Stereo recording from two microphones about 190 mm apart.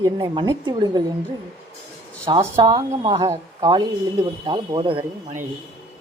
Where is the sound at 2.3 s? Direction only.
25° right (ahead or behind).